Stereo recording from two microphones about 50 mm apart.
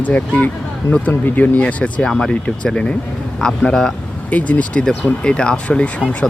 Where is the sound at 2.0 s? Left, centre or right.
Centre.